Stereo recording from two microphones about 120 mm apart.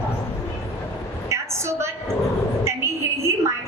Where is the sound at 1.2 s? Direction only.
25° right (ahead or behind).